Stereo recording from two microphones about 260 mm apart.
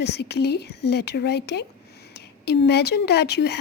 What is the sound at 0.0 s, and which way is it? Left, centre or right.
Speech, left.